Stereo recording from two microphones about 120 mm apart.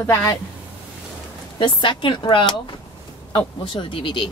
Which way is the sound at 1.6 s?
45° left (ahead or behind).